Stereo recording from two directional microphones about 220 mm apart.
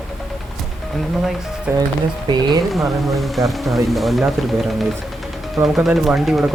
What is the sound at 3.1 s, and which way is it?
Speech, centre (ahead or behind).